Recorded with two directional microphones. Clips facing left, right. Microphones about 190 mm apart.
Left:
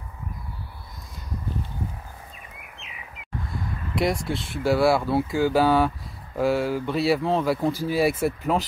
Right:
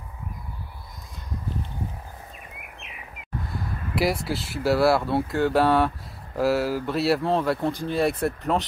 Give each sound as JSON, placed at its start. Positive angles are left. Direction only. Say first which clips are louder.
{"t": 3.4, "sound": "speech", "louder": "left 1 dB", "side_deg": -5}